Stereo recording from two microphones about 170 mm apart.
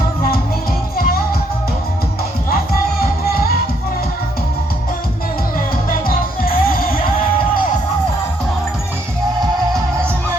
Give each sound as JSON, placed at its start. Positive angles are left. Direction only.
{"t": 0.9, "sound": "music", "side_deg": 60}
{"t": 5.5, "sound": "music", "side_deg": 55}